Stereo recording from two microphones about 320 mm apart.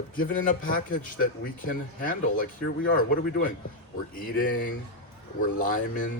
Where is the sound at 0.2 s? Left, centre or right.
Left.